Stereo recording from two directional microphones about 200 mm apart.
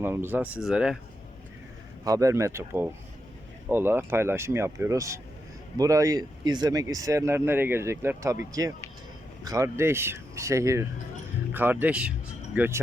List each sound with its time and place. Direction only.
0.0 s speech: 10° right (ahead or behind)
2.0 s speech: 15° right (ahead or behind)